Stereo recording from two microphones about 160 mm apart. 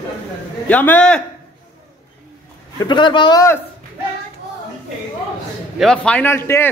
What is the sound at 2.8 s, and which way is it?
Speech, 30° left (ahead or behind).